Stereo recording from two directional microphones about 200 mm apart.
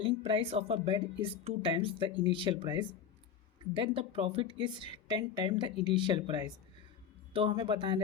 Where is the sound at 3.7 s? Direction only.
25° right (ahead or behind).